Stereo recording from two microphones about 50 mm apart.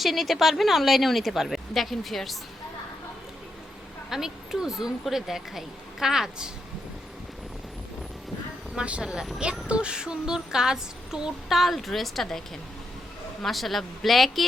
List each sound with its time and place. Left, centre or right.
0.0 s a woman's voice: centre
4.1 s speech: centre
8.7 s speech: right
11.4 s a woman's voice: centre
13.4 s a woman's voice: centre